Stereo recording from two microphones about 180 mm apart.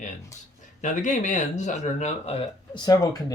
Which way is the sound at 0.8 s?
45° left (ahead or behind).